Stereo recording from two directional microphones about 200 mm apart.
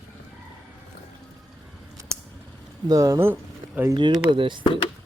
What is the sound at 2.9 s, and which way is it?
Speech, 15° right (ahead or behind).